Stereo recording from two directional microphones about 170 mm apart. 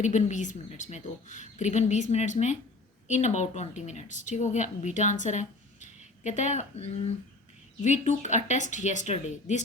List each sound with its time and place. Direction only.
0.0 s speech: 45° left (ahead or behind)